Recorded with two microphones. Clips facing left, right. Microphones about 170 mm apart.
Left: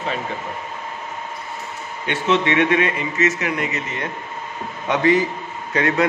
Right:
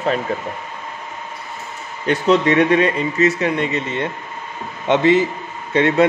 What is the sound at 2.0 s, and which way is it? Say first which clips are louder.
A man's voice: right 5 dB; 35° right (ahead or behind).